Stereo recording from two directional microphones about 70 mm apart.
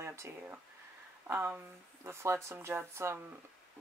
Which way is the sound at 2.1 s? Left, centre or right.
Right.